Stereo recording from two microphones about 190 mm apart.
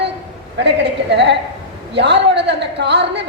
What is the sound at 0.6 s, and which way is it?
A woman's voice, 65° right (ahead or behind).